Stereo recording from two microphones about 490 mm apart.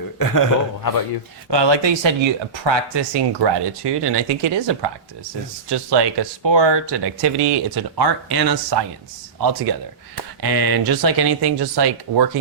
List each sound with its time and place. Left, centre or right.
0.2 s a man's voice: left
1.5 s speech: right
10.4 s speech: right